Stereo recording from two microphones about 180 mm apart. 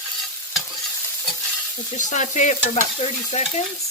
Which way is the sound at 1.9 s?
40° left (ahead or behind).